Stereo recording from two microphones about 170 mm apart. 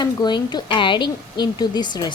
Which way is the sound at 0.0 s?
25° left (ahead or behind).